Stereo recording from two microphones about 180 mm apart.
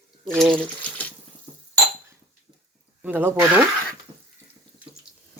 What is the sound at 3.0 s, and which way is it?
Speech, 10° right (ahead or behind).